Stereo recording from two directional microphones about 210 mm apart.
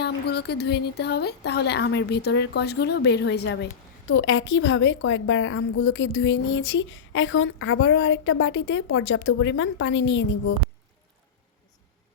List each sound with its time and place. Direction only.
0.0 s a woman's voice: 50° left (ahead or behind)